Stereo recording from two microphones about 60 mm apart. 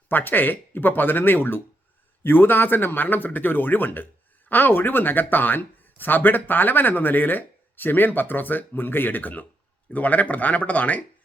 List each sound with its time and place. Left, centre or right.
0.1 s speech: left